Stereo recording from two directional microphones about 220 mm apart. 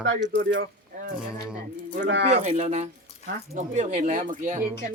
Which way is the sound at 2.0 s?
55° right (ahead or behind).